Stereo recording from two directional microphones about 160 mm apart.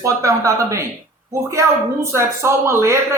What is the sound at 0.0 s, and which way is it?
A man's voice, 20° right (ahead or behind).